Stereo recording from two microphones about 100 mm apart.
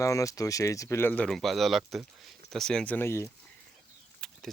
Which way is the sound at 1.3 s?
Centre (ahead or behind).